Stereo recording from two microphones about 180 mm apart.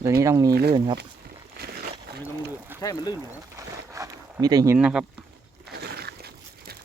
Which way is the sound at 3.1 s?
15° right (ahead or behind).